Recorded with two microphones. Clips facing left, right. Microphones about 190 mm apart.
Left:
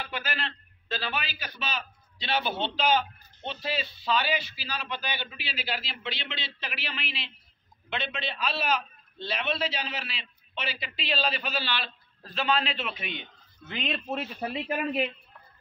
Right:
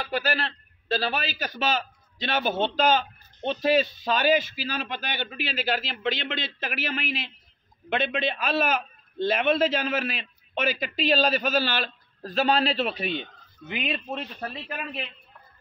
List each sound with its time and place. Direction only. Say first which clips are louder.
0.0 s a man's voice: right 7 dB; 40° right (ahead or behind)
13.7 s speech: right 3 dB; 10° right (ahead or behind)
13.9 s speech: even; 5° left (ahead or behind)